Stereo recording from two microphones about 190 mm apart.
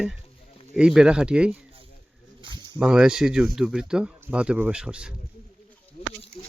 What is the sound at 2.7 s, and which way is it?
Speech, 5° right (ahead or behind).